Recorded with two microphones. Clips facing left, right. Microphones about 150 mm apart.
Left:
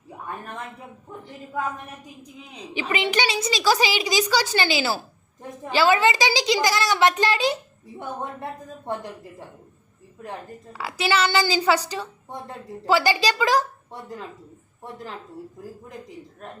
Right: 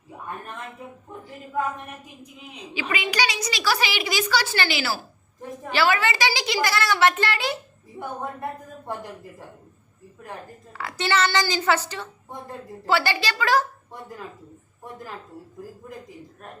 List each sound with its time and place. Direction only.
2.9 s a child's voice: 25° left (ahead or behind)
10.2 s a woman's voice: 15° left (ahead or behind)